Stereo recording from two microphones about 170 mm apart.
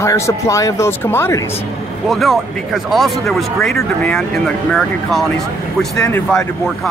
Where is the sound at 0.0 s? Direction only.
20° left (ahead or behind).